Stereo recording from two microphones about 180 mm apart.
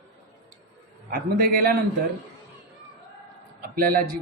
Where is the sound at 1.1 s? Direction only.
50° right (ahead or behind).